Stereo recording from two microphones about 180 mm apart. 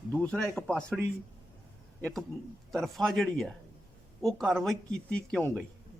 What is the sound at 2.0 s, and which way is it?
A man's voice, 5° left (ahead or behind).